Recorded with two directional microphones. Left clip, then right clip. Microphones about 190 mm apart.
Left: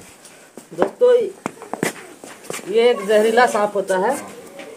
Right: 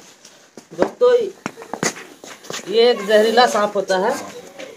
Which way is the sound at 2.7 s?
20° left (ahead or behind).